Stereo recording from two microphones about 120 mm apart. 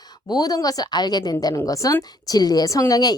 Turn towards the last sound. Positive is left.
turn(degrees=30)  # may be behind; listen again after turning